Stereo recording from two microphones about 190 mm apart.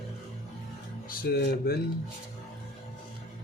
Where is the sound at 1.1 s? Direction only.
55° left (ahead or behind).